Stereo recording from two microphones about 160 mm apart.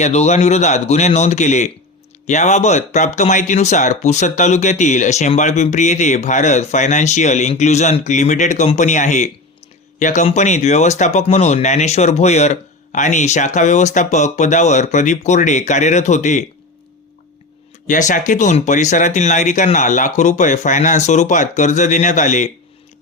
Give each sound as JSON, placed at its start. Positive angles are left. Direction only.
{"t": 0.0, "sound": "speech", "side_deg": 45}
{"t": 17.8, "sound": "speech", "side_deg": 55}